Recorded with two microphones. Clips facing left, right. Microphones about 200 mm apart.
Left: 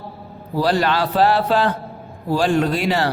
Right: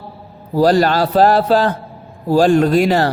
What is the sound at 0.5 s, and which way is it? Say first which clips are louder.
A man's voice: right 6 dB; 40° right (ahead or behind).